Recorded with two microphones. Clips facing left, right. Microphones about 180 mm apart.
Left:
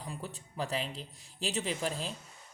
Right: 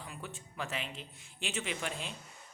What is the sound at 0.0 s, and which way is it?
Speech, 35° left (ahead or behind).